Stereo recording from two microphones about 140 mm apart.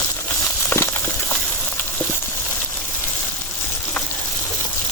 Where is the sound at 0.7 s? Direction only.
15° left (ahead or behind).